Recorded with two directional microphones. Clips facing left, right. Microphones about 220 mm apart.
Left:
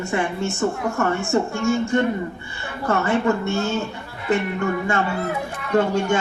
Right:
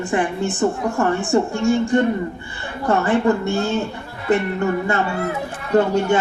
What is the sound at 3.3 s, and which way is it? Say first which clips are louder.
Speech: right 3 dB; 35° right (ahead or behind).